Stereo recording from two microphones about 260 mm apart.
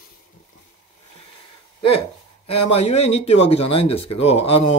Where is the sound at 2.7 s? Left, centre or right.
Left.